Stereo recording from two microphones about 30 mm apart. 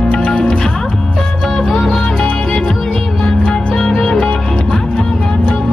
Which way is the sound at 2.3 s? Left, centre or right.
Left.